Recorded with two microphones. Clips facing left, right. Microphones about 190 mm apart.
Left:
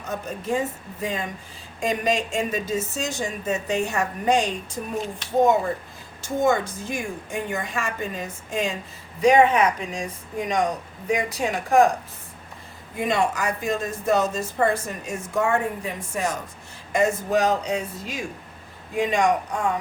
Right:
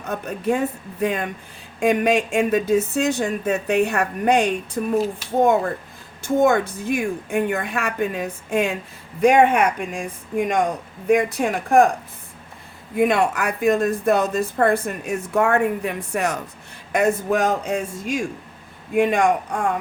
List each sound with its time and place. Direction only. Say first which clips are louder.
0.1 s a woman's voice: right 4 dB; 60° right (ahead or behind)
6.2 s a woman's voice: right 4 dB; 55° right (ahead or behind)
13.0 s a woman's voice: right 5 dB; 60° right (ahead or behind)